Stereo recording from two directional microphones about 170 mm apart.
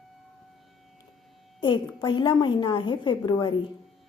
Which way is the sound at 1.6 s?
30° left (ahead or behind).